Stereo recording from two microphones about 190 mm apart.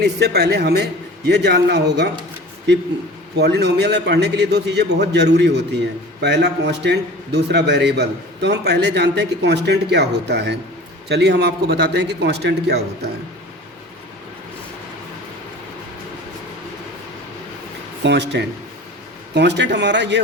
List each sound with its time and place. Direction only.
0.0 s a man's voice: 60° right (ahead or behind)
3.3 s a man's voice: 60° right (ahead or behind)
18.0 s a man's voice: 65° right (ahead or behind)